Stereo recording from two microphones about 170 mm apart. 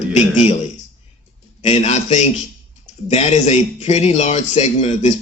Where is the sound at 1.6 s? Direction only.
40° left (ahead or behind).